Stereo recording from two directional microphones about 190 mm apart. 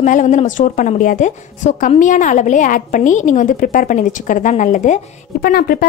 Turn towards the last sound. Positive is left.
turn(degrees=50)  # may be behind; listen again after turning